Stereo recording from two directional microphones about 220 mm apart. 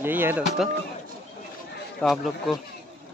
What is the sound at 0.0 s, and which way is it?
Speech, 10° right (ahead or behind).